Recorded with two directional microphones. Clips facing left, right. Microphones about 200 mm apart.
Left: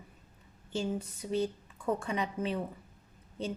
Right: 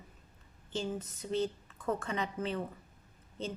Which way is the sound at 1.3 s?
10° left (ahead or behind).